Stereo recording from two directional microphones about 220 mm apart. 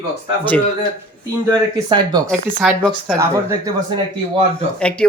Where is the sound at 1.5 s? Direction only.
20° right (ahead or behind).